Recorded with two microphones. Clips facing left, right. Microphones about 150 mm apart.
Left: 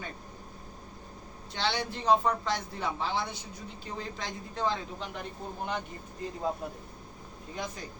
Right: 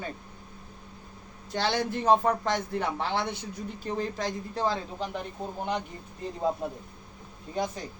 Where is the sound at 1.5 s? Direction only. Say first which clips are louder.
Right 4 dB; 45° right (ahead or behind); by 3.4 s 65° right (ahead or behind).